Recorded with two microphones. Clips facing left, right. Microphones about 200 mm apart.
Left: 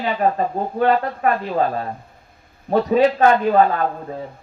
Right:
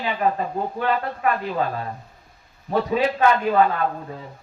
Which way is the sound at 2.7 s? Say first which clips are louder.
Left 6 dB; 40° left (ahead or behind).